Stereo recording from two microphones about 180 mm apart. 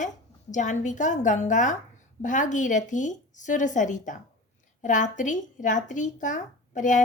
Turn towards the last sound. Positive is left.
turn(degrees=45)  # may be behind; listen again after turning